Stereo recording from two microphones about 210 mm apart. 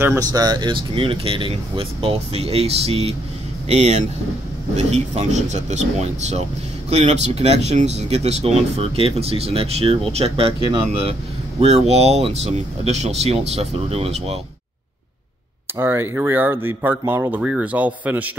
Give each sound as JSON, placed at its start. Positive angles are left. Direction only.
{"t": 0.0, "sound": "speech", "side_deg": -15}
{"t": 4.7, "sound": "speech", "side_deg": -30}
{"t": 15.8, "sound": "speech", "side_deg": -10}